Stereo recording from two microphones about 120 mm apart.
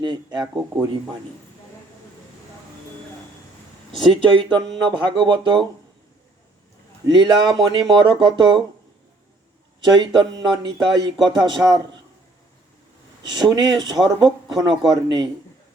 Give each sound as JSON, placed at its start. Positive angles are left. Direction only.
{"t": 0.0, "sound": "speech", "side_deg": -35}
{"t": 4.1, "sound": "speech", "side_deg": -45}
{"t": 7.1, "sound": "speech", "side_deg": -40}
{"t": 9.8, "sound": "speech", "side_deg": -40}
{"t": 13.3, "sound": "speech", "side_deg": -35}